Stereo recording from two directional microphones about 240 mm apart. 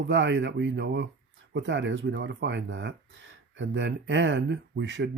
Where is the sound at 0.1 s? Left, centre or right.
Right.